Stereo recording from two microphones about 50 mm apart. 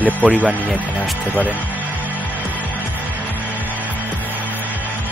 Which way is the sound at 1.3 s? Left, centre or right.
Right.